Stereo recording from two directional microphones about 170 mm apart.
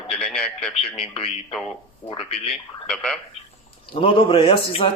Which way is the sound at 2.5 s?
5° left (ahead or behind).